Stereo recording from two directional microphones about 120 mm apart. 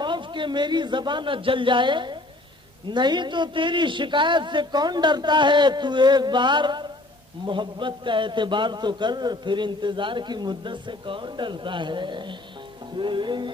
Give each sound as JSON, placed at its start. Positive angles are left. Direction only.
{"t": 0.0, "sound": "a man's voice", "side_deg": -40}